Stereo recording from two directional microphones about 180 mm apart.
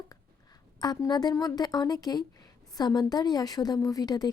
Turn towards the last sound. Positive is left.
turn(degrees=20)  # may be behind; listen again after turning